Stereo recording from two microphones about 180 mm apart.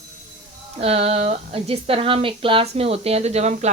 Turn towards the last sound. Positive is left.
turn(degrees=-40)  # may be behind; listen again after turning